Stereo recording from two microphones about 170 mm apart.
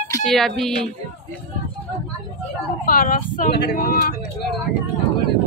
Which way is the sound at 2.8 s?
55° left (ahead or behind).